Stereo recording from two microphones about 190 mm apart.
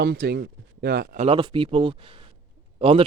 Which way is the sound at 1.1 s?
30° right (ahead or behind).